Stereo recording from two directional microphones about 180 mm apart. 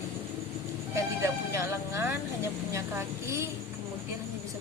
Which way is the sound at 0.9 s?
15° right (ahead or behind).